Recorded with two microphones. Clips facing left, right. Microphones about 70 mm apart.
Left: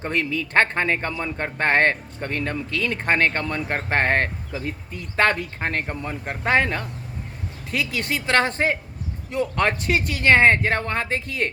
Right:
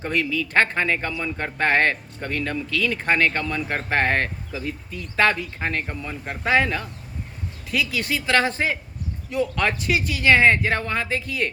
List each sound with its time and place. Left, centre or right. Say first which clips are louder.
0.0 s speech: right 1 dB; left